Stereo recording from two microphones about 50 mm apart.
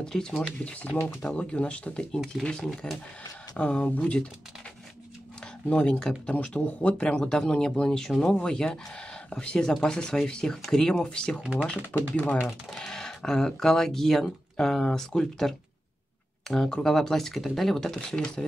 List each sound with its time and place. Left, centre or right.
0.0 s speech: centre
2.1 s speech: centre
2.4 s speech: centre
3.5 s speech: left
5.7 s speech: left
5.9 s speech: centre
6.5 s speech: left
12.7 s speech: centre